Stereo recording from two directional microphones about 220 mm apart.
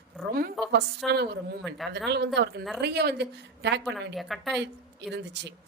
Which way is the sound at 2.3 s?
50° right (ahead or behind).